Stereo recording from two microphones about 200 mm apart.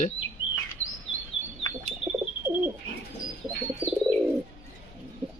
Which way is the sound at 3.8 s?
10° right (ahead or behind).